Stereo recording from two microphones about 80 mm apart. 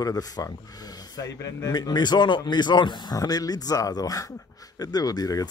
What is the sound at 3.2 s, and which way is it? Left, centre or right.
Speech, left.